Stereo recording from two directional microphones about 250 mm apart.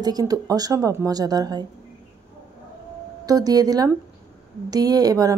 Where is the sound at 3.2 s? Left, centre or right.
Centre.